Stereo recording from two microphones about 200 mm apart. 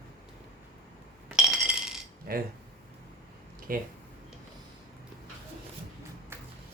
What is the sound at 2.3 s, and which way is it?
Speech, 50° right (ahead or behind).